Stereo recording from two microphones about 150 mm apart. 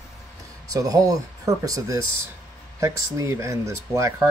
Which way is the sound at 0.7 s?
25° right (ahead or behind).